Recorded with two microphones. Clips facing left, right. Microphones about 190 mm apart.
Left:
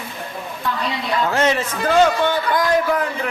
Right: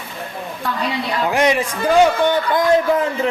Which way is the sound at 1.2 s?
15° right (ahead or behind).